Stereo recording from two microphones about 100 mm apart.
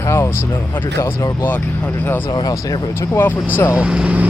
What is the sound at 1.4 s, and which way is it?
Speech, 15° left (ahead or behind).